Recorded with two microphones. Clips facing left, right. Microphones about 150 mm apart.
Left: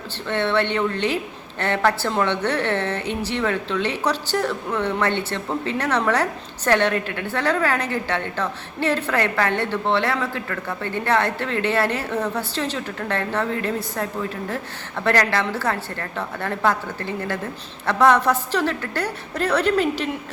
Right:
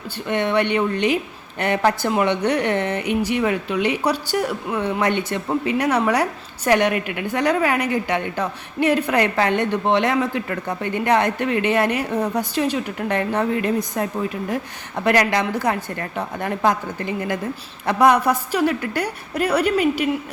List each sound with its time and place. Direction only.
0.3 s a woman's voice: 15° right (ahead or behind)